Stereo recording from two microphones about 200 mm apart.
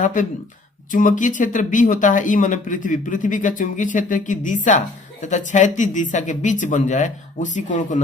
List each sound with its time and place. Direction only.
0.0 s speech: 40° left (ahead or behind)